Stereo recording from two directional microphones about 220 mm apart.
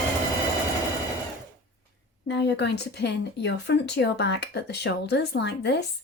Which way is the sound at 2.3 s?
50° left (ahead or behind).